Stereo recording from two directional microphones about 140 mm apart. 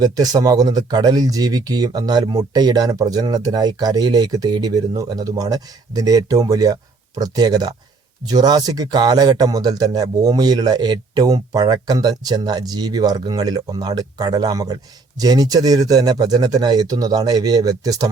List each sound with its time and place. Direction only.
0.0 s speech: 30° right (ahead or behind)